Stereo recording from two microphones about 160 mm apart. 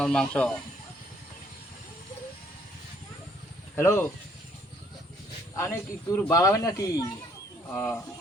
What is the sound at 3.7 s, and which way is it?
Speech, 15° left (ahead or behind).